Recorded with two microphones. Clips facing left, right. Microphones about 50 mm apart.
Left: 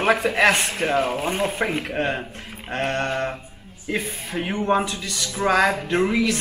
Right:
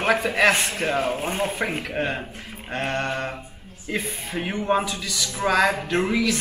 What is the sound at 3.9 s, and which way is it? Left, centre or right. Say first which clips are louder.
A man's voice: left 2 dB; centre.